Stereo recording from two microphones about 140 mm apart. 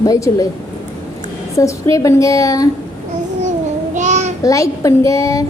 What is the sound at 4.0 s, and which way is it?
Child singing, 55° right (ahead or behind).